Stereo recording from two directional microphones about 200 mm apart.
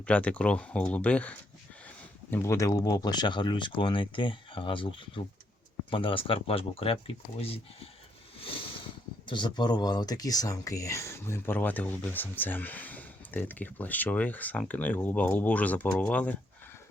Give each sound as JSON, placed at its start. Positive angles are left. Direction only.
{"t": 0.0, "sound": "speech", "side_deg": 5}
{"t": 8.4, "sound": "a sound", "side_deg": 30}
{"t": 9.2, "sound": "speech", "side_deg": 25}